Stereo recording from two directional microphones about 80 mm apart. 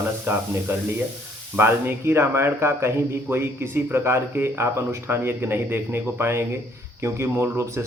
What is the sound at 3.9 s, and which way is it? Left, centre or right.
Speech, right.